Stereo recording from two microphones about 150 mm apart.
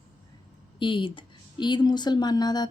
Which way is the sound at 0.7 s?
35° left (ahead or behind).